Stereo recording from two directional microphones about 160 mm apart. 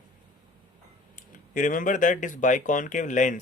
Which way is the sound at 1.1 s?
55° left (ahead or behind).